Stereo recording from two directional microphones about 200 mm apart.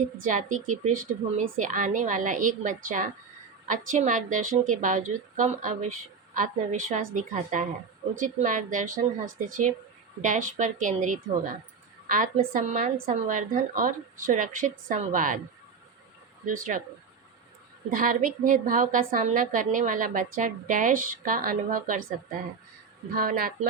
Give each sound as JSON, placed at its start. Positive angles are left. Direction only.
{"t": 0.2, "sound": "a woman's voice", "side_deg": -40}
{"t": 16.5, "sound": "a woman's voice", "side_deg": -40}
{"t": 17.9, "sound": "a woman's voice", "side_deg": -45}
{"t": 23.1, "sound": "a woman's voice", "side_deg": -45}